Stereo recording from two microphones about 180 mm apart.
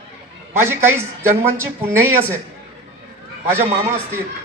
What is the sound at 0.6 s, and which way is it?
A woman's voice, 15° right (ahead or behind).